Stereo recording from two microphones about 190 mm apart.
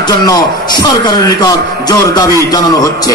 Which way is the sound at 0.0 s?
20° left (ahead or behind).